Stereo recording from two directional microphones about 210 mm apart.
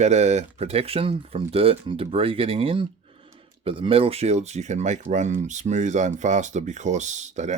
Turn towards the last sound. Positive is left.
turn(degrees=-35)  # may be behind; listen again after turning